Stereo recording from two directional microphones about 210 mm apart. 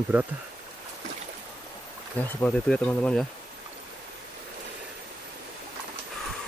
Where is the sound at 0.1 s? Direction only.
10° right (ahead or behind).